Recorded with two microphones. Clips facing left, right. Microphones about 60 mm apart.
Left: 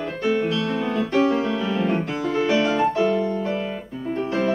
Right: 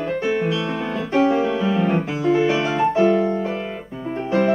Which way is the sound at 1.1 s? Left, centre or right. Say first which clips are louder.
Right 4 dB; centre.